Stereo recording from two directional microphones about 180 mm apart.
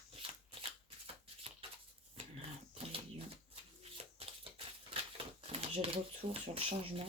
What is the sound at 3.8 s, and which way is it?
Typewriter, 30° right (ahead or behind).